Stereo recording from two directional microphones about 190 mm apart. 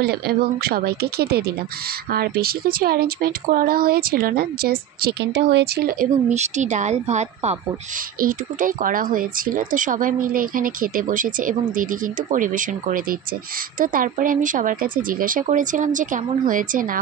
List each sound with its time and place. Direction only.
0.0 s speech: 55° right (ahead or behind)
6.3 s speech: 35° right (ahead or behind)